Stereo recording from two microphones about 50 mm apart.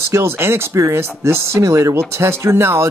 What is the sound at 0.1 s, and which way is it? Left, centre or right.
Speech, right.